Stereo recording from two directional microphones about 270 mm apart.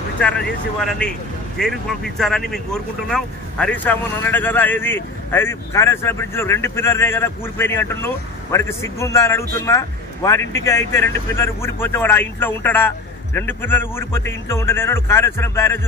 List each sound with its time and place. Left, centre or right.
0.2 s speech: centre